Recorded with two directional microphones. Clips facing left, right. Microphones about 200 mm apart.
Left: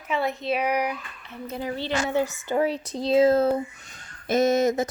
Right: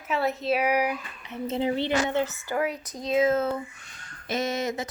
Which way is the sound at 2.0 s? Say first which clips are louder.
Left 2 dB; 10° left (ahead or behind).